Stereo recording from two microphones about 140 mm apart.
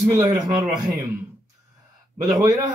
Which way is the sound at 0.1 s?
25° right (ahead or behind).